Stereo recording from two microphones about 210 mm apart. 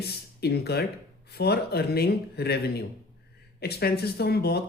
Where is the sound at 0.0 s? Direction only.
50° left (ahead or behind).